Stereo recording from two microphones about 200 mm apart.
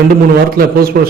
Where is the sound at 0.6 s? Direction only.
50° right (ahead or behind).